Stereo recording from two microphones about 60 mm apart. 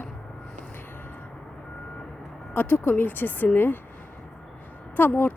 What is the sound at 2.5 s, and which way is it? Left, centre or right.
Speech, left.